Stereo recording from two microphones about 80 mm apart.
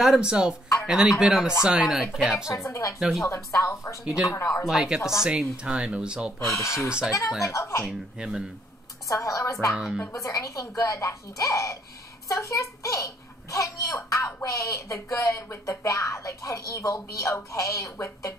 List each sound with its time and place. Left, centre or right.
0.0 s speech: centre
2.5 s a child's voice: left
3.0 s speech: centre
3.3 s a child's voice: left
4.0 s speech: centre
6.4 s a child's voice: left
7.8 s speech: centre
9.1 s a child's voice: left